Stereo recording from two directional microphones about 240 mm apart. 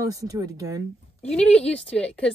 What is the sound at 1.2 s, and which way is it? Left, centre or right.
Speech, centre.